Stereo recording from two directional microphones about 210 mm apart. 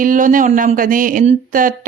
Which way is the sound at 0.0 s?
40° right (ahead or behind).